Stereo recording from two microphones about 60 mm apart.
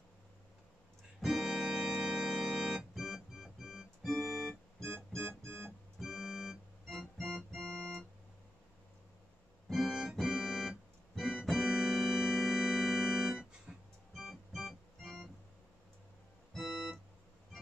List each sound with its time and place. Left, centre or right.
1.2 s organ: centre
4.8 s organ: right
5.9 s organ: centre
9.7 s keyboard: centre
11.1 s organ: centre
13.4 s music: centre
14.1 s organ: centre
16.6 s keyboard: centre